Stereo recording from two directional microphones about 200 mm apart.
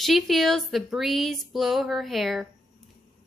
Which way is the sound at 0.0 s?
Centre (ahead or behind).